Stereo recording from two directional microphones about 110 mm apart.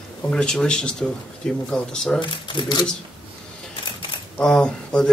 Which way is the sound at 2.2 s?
45° left (ahead or behind).